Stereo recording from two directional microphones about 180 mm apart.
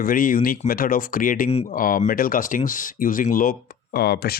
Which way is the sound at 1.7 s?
50° left (ahead or behind).